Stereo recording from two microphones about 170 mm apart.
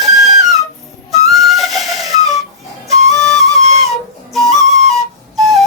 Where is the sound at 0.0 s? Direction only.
Centre (ahead or behind).